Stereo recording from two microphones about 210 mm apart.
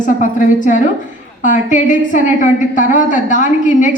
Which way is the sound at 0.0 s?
40° left (ahead or behind).